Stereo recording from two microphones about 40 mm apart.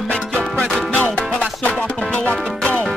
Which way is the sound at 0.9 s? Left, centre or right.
Left.